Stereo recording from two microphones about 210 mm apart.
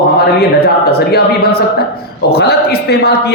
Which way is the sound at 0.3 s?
45° left (ahead or behind).